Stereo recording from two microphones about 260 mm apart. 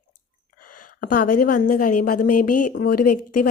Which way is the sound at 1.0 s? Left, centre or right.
Left.